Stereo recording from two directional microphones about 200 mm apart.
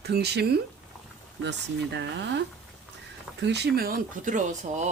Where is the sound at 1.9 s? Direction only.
60° right (ahead or behind); by 4.9 s 35° right (ahead or behind).